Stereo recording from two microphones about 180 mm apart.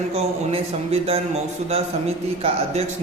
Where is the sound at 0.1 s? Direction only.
35° right (ahead or behind).